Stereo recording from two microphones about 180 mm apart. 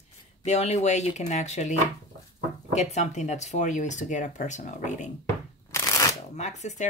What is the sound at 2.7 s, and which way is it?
Speech, 40° left (ahead or behind).